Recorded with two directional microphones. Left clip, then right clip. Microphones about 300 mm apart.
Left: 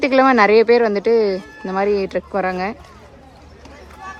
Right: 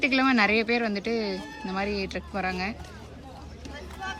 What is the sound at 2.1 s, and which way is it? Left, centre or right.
Speech, left.